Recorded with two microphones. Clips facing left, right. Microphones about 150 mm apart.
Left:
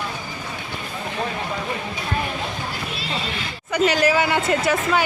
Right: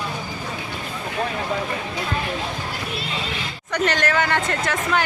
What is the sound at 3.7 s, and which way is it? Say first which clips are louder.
Speech: left 3 dB; 5° left (ahead or behind).